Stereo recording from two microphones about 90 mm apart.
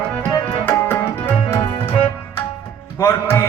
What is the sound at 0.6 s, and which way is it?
Tabla, 25° left (ahead or behind).